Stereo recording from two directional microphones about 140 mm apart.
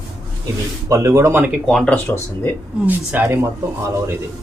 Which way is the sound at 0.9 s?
20° right (ahead or behind).